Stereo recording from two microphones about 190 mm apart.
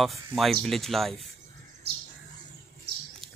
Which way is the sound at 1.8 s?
60° right (ahead or behind).